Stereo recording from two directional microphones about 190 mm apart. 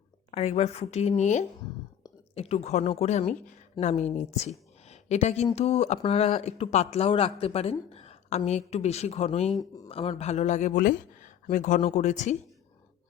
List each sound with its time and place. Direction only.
0.3 s a woman's voice: 35° left (ahead or behind)
9.6 s speech: 20° left (ahead or behind)
9.9 s speech: 30° left (ahead or behind)